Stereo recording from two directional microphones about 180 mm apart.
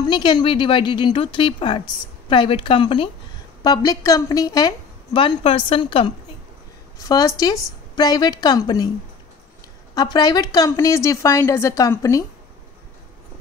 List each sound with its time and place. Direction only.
0.0 s a woman's voice: 25° left (ahead or behind)
9.9 s a woman's voice: 20° left (ahead or behind)